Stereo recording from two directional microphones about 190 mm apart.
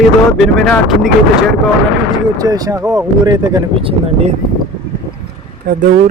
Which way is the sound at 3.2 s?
20° right (ahead or behind).